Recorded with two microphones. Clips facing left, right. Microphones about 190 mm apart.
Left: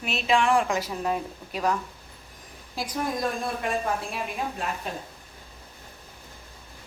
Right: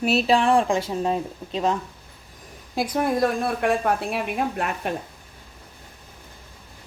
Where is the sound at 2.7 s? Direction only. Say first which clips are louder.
Right 7 dB; 60° right (ahead or behind).